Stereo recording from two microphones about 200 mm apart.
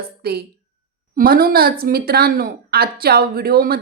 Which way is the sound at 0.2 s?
50° right (ahead or behind).